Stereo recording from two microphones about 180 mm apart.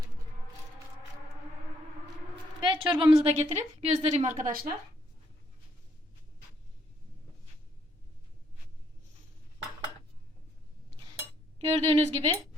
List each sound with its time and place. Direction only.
2.6 s a woman's voice: 25° right (ahead or behind)
3.2 s speech: 35° right (ahead or behind)
11.6 s speech: 35° right (ahead or behind)